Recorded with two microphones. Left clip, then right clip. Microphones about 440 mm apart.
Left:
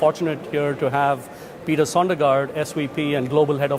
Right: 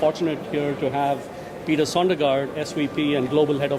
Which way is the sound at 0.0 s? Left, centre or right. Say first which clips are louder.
Left 2 dB; left.